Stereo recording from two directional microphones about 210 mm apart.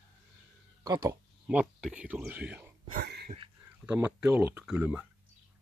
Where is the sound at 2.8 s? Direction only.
45° right (ahead or behind).